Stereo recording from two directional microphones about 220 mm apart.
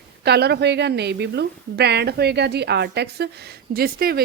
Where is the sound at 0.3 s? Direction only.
50° right (ahead or behind).